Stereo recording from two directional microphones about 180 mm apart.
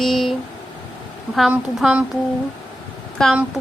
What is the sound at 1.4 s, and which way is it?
Speech, 5° right (ahead or behind).